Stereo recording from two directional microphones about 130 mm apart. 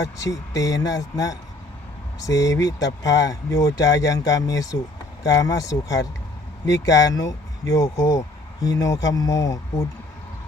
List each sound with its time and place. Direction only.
0.0 s speech: 25° left (ahead or behind)